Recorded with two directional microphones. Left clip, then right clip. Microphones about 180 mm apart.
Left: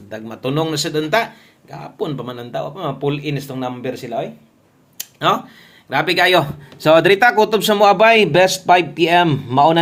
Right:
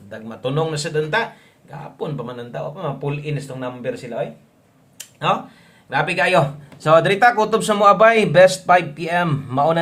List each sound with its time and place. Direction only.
0.1 s speech: 25° left (ahead or behind)
4.9 s a sound: 35° left (ahead or behind)
5.9 s speech: 30° left (ahead or behind); by 9.7 s 15° left (ahead or behind)